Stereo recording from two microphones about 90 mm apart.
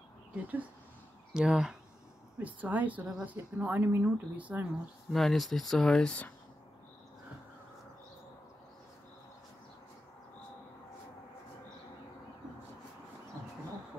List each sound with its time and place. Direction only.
0.3 s speech: 15° right (ahead or behind)
1.3 s speech: 5° right (ahead or behind)
2.3 s speech: 15° right (ahead or behind)
5.1 s speech: centre (ahead or behind)